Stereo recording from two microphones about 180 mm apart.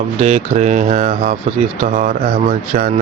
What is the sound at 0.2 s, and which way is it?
Speech, 40° right (ahead or behind).